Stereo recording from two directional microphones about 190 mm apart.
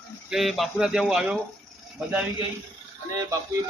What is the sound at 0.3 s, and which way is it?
Speech, centre (ahead or behind).